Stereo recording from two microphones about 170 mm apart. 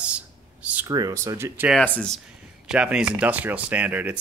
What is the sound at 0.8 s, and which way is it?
Speech, 20° right (ahead or behind).